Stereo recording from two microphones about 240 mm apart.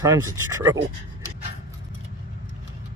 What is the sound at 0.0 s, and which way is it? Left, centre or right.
Speech, centre.